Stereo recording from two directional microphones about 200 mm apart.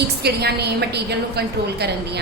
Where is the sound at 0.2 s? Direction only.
55° right (ahead or behind).